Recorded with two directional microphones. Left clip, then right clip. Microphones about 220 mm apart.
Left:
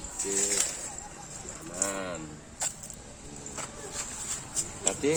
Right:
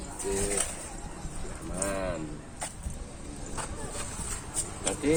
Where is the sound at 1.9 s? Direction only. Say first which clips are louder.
Right 5 dB; 35° left (ahead or behind).